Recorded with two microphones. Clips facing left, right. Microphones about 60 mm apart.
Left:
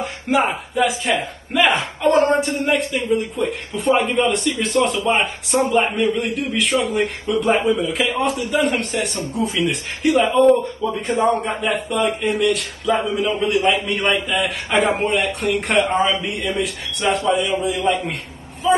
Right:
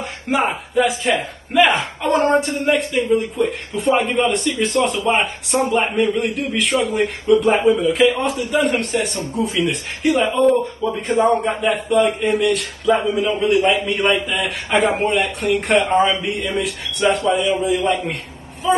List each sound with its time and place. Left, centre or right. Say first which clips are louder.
0.0 s speech: left 1 dB; centre